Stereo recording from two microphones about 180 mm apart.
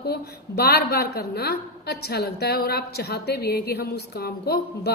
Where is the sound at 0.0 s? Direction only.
60° left (ahead or behind).